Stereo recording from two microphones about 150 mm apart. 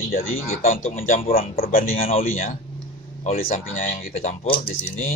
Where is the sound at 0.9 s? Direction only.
65° left (ahead or behind).